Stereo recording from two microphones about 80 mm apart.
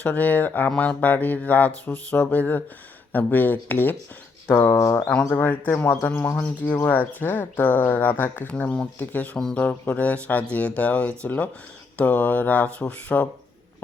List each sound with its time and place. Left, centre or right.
0.0 s speech: left
5.0 s speech: centre
9.4 s speech: centre
9.6 s speech: left